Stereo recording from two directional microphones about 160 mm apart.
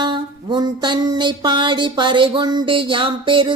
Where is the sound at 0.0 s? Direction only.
30° right (ahead or behind).